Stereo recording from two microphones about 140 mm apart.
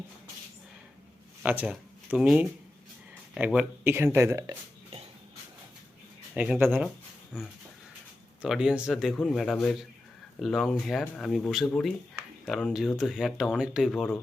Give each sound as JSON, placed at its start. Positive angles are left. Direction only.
{"t": 1.4, "sound": "speech", "side_deg": -10}
{"t": 6.3, "sound": "speech", "side_deg": -10}